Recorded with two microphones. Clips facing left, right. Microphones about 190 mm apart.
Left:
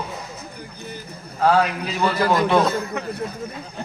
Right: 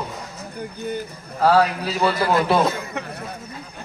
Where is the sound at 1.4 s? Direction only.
35° right (ahead or behind).